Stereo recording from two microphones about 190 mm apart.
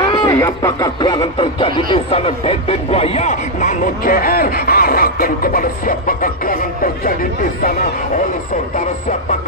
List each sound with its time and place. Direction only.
0.1 s speech: 20° left (ahead or behind); by 7.2 s 50° left (ahead or behind)